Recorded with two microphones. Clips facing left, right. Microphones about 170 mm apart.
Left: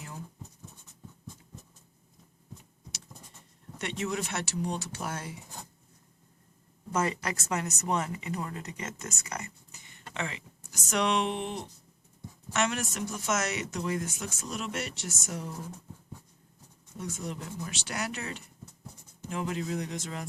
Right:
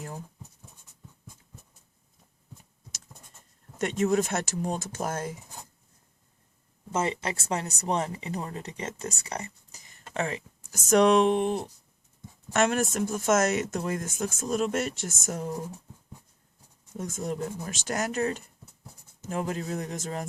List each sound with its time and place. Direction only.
3.8 s speech: 45° right (ahead or behind)
6.9 s speech: 25° right (ahead or behind); by 15.5 s 45° right (ahead or behind)
17.0 s speech: 45° right (ahead or behind)